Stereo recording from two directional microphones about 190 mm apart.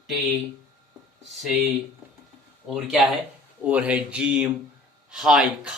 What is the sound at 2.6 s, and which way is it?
Speech, centre (ahead or behind).